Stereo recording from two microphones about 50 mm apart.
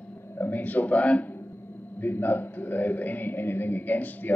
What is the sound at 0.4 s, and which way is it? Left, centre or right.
Speech, left.